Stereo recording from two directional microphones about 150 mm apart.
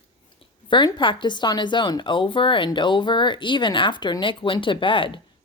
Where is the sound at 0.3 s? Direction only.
30° left (ahead or behind).